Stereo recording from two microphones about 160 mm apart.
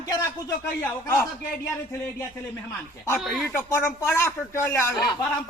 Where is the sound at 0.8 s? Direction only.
15° left (ahead or behind).